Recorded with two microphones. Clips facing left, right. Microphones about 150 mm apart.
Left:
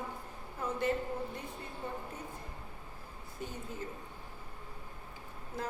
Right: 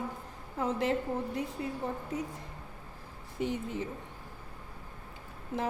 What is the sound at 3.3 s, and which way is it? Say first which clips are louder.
Speech: right 10 dB; 90° right.